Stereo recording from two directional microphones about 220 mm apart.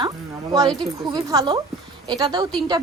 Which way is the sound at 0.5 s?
15° right (ahead or behind).